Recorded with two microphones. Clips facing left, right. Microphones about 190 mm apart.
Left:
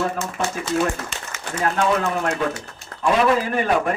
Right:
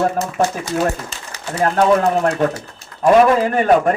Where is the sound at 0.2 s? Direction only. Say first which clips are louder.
Right 6 dB; 45° right (ahead or behind).